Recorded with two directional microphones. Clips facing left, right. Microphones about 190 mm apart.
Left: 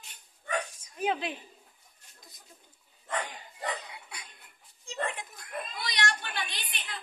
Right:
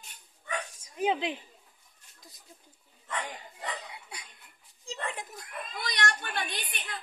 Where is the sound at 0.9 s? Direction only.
15° right (ahead or behind).